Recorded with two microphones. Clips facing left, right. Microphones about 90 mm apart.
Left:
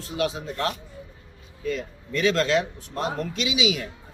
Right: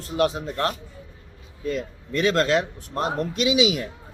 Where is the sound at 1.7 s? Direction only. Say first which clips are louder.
Right 1 dB; 45° right (ahead or behind).